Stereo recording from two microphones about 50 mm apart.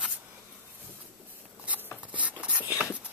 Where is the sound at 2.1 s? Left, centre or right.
Right.